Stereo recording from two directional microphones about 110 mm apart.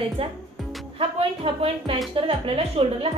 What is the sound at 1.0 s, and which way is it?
A woman's voice, 60° right (ahead or behind).